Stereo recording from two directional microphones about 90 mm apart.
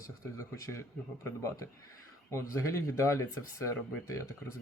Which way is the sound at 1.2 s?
35° left (ahead or behind).